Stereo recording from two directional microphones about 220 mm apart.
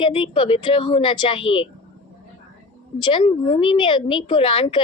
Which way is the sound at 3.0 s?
20° left (ahead or behind).